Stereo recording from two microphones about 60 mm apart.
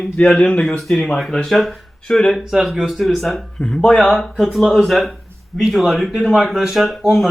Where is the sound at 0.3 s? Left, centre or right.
Centre.